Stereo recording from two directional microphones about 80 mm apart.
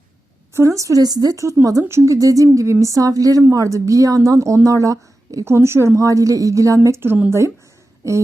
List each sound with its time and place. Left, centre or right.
0.5 s a woman's voice: right
5.5 s a woman's voice: right